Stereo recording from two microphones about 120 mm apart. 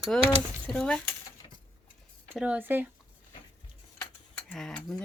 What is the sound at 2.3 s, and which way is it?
Speech, 10° right (ahead or behind).